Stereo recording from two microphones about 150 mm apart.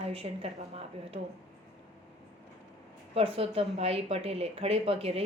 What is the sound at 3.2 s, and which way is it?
A woman's voice, 40° right (ahead or behind).